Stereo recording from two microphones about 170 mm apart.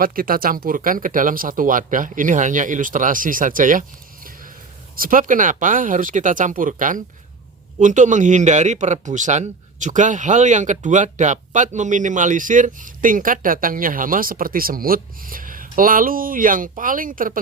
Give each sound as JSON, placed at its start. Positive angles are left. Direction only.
{"t": 0.0, "sound": "speech", "side_deg": -60}